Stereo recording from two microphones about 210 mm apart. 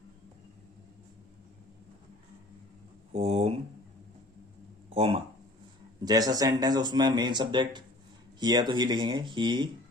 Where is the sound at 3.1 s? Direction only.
30° right (ahead or behind).